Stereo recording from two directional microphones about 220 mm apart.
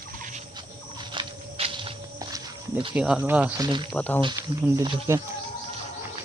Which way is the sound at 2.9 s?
5° right (ahead or behind).